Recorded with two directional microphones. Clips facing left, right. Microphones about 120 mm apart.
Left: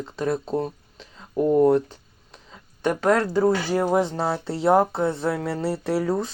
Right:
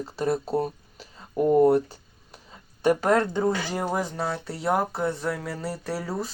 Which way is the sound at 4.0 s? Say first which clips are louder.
Left 5 dB; 25° left (ahead or behind).